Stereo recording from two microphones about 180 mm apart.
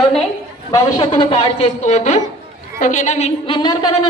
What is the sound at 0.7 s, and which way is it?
A woman's voice, 20° left (ahead or behind).